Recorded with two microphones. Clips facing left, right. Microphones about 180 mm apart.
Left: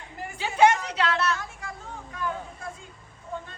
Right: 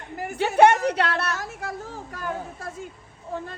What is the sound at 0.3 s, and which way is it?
A woman's voice, 60° right (ahead or behind).